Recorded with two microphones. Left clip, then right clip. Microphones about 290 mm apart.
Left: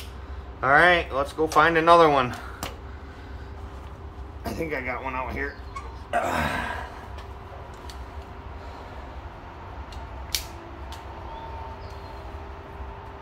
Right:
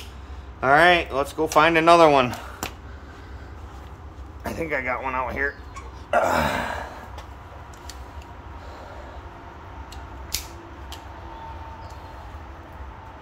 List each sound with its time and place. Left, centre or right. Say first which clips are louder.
0.6 s speech: right 2 dB; right
4.4 s speech: right 3 dB; centre
6.0 s a sound: right 5 dB; centre
10.3 s scissors: left 2 dB; right